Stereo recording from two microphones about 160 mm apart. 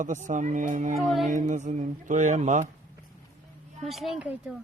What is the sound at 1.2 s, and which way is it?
Speech, 50° right (ahead or behind).